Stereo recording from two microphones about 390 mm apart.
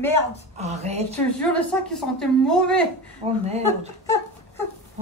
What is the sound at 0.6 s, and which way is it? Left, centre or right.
Speech, centre.